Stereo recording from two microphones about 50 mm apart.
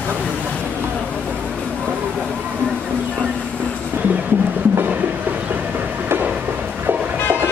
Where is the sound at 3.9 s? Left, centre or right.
Right.